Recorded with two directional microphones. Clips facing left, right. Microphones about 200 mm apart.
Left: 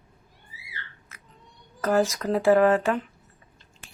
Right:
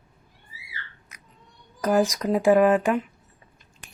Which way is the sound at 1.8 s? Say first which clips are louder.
Right 1 dB; 15° right (ahead or behind).